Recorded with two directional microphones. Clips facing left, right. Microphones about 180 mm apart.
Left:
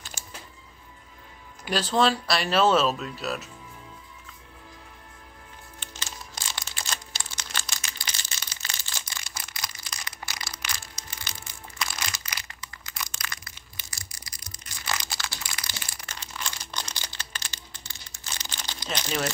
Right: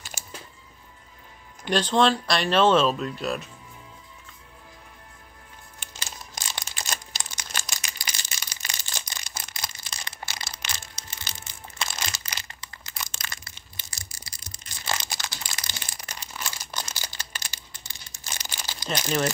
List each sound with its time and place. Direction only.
1.6 s speech: 5° left (ahead or behind)
5.8 s music: 15° right (ahead or behind)
18.9 s crumpling: 10° right (ahead or behind)